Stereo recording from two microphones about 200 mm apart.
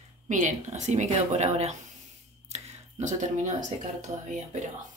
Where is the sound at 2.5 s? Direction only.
35° right (ahead or behind).